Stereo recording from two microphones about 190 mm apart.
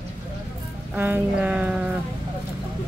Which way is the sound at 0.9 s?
10° right (ahead or behind).